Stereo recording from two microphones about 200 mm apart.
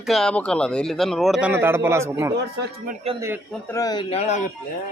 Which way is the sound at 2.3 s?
55° right (ahead or behind).